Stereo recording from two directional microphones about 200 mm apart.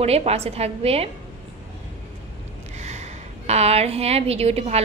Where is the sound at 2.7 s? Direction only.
35° right (ahead or behind).